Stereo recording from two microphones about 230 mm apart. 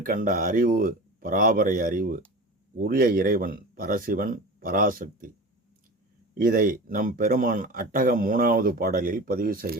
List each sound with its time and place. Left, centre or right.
0.0 s speech: right
6.3 s speech: right